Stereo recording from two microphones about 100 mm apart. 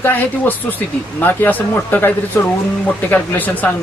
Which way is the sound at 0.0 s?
20° left (ahead or behind).